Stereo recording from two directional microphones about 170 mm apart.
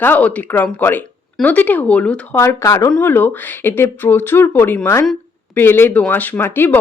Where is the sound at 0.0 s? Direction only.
10° left (ahead or behind).